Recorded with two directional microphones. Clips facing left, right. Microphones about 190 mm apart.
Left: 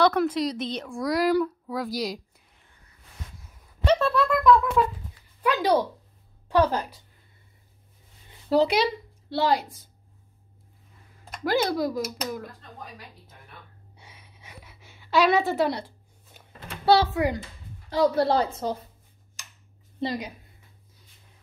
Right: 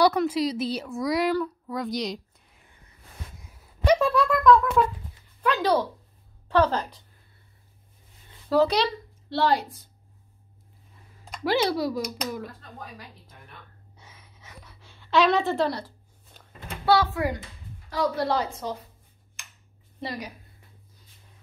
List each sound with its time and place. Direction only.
0.2 s speech: 5° right (ahead or behind)
3.4 s a sound: 10° right (ahead or behind)
4.8 s speech: 5° left (ahead or behind)
8.5 s speech: 20° left (ahead or behind)
8.7 s speech: 10° left (ahead or behind)
11.2 s speech: centre (ahead or behind)
13.9 s a sound: 10° left (ahead or behind)
16.8 s a woman's voice: 25° left (ahead or behind)
20.0 s speech: 25° left (ahead or behind)